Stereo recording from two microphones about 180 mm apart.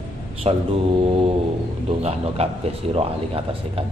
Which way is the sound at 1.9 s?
35° right (ahead or behind).